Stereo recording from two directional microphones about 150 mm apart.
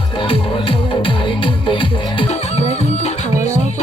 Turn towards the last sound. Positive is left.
turn(degrees=50)  # may be behind; listen again after turning